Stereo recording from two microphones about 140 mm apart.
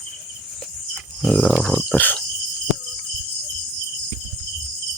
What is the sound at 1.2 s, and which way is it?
Speech, centre (ahead or behind).